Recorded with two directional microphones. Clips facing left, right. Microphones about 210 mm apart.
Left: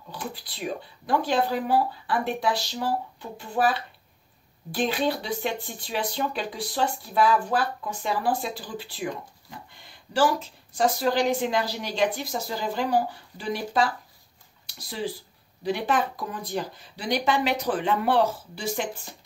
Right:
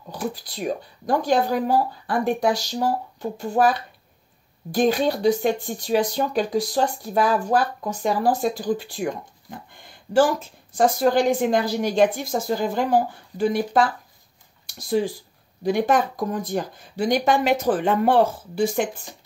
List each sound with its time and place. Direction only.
0.1 s speech: 45° right (ahead or behind)